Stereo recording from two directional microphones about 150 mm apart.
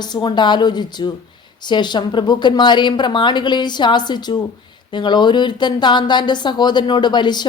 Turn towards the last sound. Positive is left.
turn(degrees=30)  # may be behind; listen again after turning